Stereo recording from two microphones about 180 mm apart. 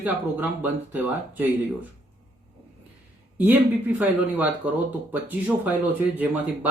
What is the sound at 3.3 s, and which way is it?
Speech, 10° right (ahead or behind).